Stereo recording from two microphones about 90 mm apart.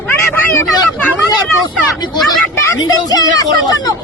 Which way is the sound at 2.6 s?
45° left (ahead or behind).